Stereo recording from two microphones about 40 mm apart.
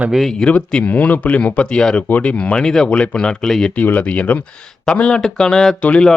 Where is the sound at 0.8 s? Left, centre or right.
Left.